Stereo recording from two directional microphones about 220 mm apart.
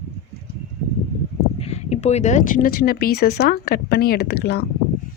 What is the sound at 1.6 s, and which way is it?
Speech, 30° left (ahead or behind).